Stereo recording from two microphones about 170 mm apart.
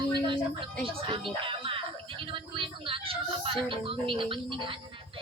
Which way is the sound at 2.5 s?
30° right (ahead or behind).